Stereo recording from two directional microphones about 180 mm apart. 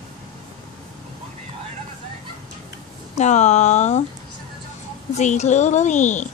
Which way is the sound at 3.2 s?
40° left (ahead or behind).